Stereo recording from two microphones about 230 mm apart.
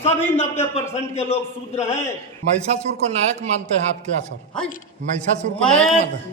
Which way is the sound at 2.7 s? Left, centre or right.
Right.